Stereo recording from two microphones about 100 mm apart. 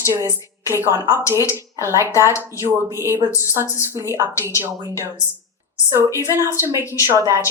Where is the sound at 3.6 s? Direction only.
30° left (ahead or behind).